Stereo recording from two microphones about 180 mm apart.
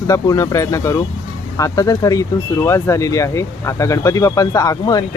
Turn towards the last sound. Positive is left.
turn(degrees=20)  # may be behind; listen again after turning